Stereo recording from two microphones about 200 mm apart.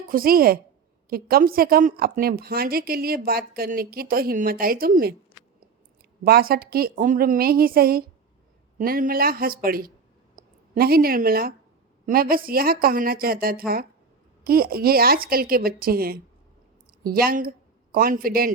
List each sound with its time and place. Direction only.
0.1 s a woman's voice: 45° right (ahead or behind)
6.2 s a woman's voice: 50° right (ahead or behind)